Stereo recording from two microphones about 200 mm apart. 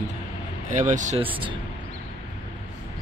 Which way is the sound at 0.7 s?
40° right (ahead or behind).